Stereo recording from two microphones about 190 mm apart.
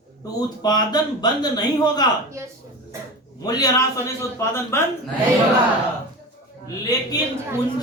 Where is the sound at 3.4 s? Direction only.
20° left (ahead or behind).